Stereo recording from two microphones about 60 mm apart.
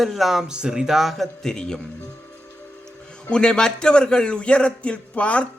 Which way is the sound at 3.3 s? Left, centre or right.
Centre.